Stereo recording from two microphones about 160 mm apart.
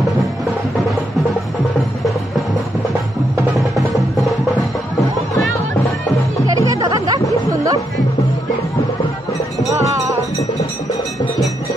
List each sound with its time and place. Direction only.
3.5 s music: centre (ahead or behind)
6.4 s music: 20° right (ahead or behind)